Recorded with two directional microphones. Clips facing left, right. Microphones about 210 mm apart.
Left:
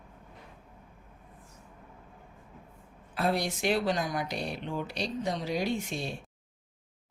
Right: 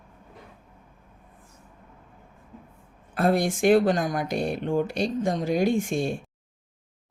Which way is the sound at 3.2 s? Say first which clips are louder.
Right 7 dB; 50° right (ahead or behind).